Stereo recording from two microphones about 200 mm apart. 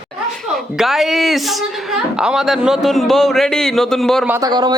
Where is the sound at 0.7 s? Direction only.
Centre (ahead or behind).